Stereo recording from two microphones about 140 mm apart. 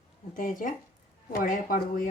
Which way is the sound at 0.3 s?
70° left (ahead or behind).